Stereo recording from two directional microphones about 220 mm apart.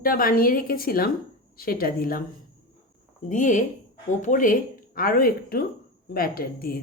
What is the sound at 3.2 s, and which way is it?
A woman's voice, 35° left (ahead or behind).